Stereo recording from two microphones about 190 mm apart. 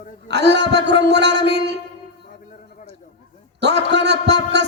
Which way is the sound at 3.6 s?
65° right (ahead or behind).